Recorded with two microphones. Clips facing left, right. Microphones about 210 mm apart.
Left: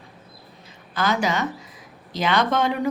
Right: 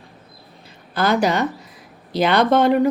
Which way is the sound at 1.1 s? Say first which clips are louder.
Right 5 dB; 35° right (ahead or behind).